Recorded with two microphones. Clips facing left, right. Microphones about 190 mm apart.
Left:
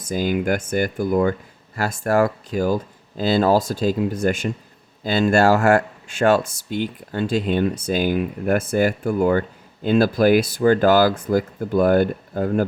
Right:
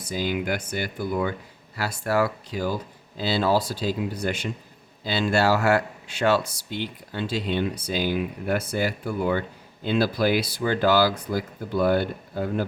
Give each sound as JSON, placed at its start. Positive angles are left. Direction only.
{"t": 0.0, "sound": "speech", "side_deg": 45}